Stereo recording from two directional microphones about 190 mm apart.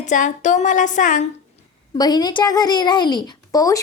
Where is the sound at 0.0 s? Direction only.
40° left (ahead or behind).